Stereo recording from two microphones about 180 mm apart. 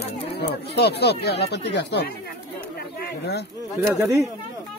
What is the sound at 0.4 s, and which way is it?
Speech, 65° left (ahead or behind).